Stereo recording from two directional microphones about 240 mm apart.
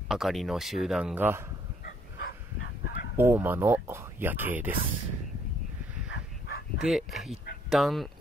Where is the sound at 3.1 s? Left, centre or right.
Centre.